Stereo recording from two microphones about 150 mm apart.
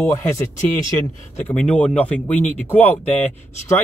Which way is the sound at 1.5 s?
10° left (ahead or behind).